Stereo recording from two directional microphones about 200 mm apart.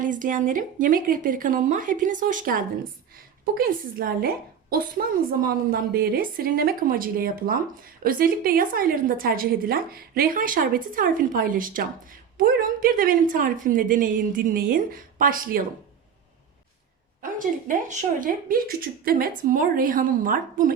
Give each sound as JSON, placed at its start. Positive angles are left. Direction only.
{"t": 0.0, "sound": "a woman's voice", "side_deg": -40}
{"t": 17.2, "sound": "a woman's voice", "side_deg": -40}